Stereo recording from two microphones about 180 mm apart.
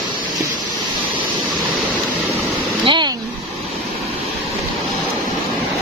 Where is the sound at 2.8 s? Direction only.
25° right (ahead or behind).